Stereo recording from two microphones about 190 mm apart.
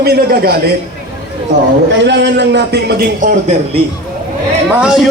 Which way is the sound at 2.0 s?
65° right (ahead or behind).